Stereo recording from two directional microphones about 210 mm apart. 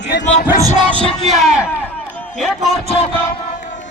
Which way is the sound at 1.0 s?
Centre (ahead or behind).